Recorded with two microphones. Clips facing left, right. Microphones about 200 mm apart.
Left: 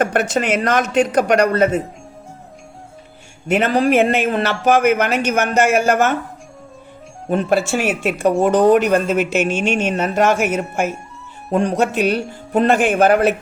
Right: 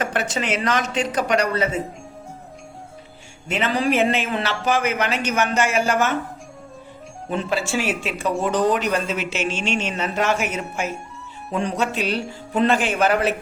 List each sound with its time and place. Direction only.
0.0 s speech: 55° left (ahead or behind)
3.5 s speech: 50° left (ahead or behind)
7.3 s speech: 50° left (ahead or behind)